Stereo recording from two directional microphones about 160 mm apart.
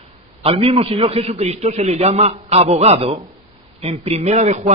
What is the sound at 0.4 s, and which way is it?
A man's voice, 40° right (ahead or behind).